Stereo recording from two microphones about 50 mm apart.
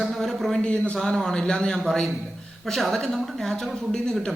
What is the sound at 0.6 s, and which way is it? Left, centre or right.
Speech, left.